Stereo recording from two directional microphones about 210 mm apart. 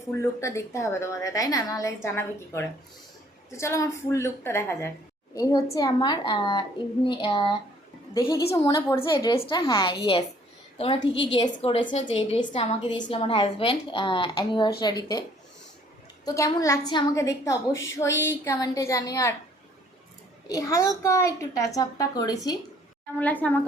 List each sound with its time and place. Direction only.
0.2 s a woman's voice: 15° left (ahead or behind)
8.5 s a woman's voice: 15° left (ahead or behind)
16.2 s a woman's voice: 15° left (ahead or behind)
20.5 s a woman's voice: 15° left (ahead or behind)
23.2 s a woman's voice: 10° left (ahead or behind)